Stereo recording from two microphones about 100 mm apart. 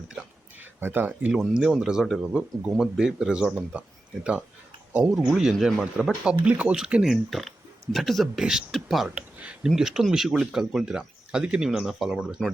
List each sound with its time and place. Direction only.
0.8 s speech: 20° right (ahead or behind)
1.3 s speech: 5° right (ahead or behind)